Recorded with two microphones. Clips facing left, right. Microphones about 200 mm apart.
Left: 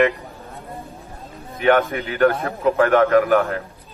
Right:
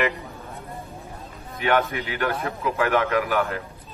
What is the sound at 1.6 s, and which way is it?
Speech, 45° left (ahead or behind).